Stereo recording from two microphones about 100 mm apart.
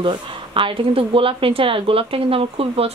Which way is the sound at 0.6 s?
60° right (ahead or behind).